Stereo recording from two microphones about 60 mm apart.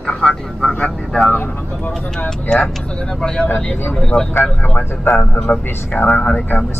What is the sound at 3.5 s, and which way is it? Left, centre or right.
Speech, left.